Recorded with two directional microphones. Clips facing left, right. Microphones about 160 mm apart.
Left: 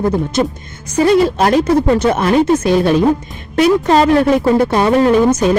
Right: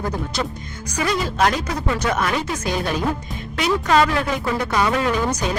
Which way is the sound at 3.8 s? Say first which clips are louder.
Left 7 dB; 30° left (ahead or behind).